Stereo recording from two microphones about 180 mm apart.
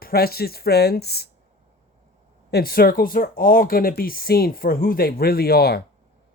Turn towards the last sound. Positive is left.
turn(degrees=60)  # may be behind; listen again after turning